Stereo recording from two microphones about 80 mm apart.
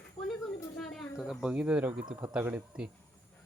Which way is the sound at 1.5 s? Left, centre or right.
Centre.